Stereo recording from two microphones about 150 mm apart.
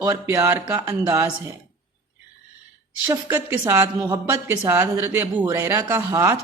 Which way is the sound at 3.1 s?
15° right (ahead or behind).